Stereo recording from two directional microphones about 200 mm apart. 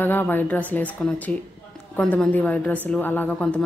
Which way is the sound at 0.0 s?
10° left (ahead or behind).